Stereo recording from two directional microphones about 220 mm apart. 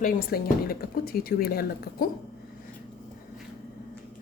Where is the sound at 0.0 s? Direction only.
40° left (ahead or behind).